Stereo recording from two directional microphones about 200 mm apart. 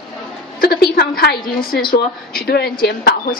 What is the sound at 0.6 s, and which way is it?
A woman's voice, 50° left (ahead or behind).